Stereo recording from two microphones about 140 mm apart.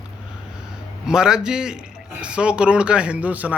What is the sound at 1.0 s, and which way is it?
A man's voice, 5° right (ahead or behind).